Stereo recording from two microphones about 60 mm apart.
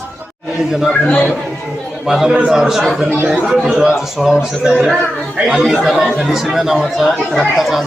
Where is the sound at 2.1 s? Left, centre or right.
Centre.